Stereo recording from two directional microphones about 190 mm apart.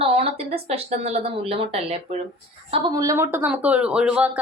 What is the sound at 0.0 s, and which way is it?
A woman's voice, 30° right (ahead or behind).